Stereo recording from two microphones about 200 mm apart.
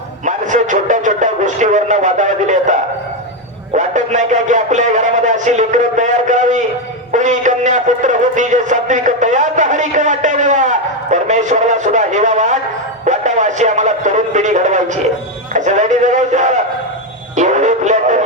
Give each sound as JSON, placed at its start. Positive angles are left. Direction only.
{"t": 0.3, "sound": "speech", "side_deg": -40}
{"t": 3.8, "sound": "a man's voice", "side_deg": -35}
{"t": 17.3, "sound": "music", "side_deg": -35}